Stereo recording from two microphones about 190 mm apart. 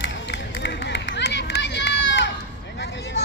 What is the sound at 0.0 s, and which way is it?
Run, 70° left (ahead or behind).